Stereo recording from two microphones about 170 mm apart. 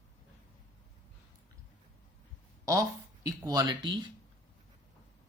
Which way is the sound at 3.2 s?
25° right (ahead or behind).